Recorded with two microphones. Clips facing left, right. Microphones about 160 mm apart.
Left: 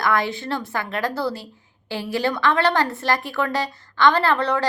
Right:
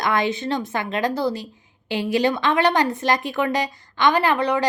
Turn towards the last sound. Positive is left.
turn(degrees=-15)  # may be behind; listen again after turning